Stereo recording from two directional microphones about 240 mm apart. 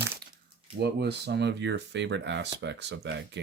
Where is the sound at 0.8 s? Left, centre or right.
Right.